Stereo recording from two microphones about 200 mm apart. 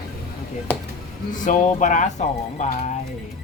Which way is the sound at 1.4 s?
40° left (ahead or behind).